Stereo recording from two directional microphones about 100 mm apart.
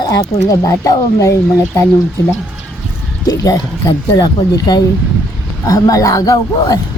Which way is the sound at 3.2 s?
35° left (ahead or behind).